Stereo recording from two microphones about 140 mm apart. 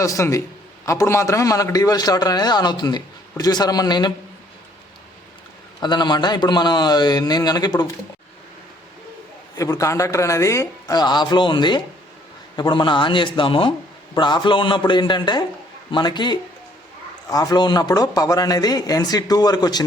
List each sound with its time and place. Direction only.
0.0 s a man's voice: 20° left (ahead or behind)
5.8 s a man's voice: 30° left (ahead or behind)
9.6 s a man's voice: 25° left (ahead or behind)